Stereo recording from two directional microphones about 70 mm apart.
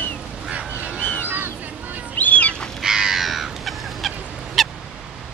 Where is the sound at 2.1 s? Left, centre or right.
Left.